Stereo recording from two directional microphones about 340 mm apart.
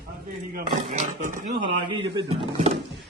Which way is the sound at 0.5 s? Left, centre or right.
Right.